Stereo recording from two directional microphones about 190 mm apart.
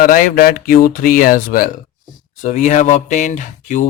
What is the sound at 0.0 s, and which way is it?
Speech, 45° left (ahead or behind).